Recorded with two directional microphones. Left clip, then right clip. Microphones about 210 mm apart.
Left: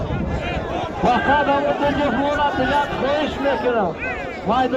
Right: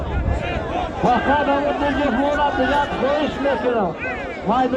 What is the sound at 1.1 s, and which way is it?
Speech, 50° left (ahead or behind).